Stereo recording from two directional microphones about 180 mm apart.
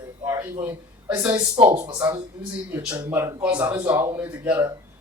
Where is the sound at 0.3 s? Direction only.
10° right (ahead or behind).